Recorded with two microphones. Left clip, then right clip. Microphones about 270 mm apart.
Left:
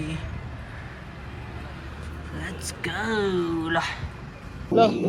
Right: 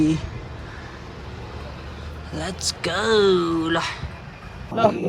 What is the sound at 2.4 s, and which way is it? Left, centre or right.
Speech, centre.